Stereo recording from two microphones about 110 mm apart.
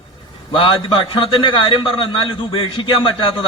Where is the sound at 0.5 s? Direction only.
55° left (ahead or behind).